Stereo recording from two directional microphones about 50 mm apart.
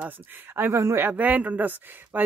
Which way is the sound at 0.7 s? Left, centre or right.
Right.